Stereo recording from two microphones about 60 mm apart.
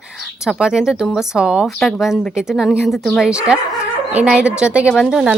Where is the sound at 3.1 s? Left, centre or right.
Centre.